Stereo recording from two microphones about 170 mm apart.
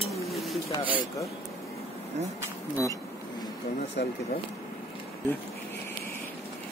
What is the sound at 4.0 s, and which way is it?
Speech, 75° left (ahead or behind).